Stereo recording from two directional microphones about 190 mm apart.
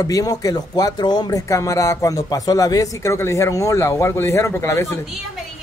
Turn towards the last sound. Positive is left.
turn(degrees=15)  # may be behind; listen again after turning